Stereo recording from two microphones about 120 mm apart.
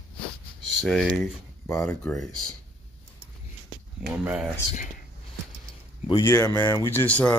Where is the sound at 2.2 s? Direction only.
5° left (ahead or behind).